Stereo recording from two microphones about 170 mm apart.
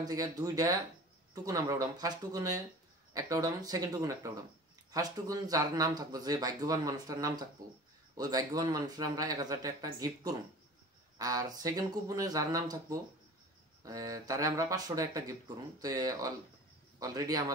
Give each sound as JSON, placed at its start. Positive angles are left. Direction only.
{"t": 0.0, "sound": "speech", "side_deg": -20}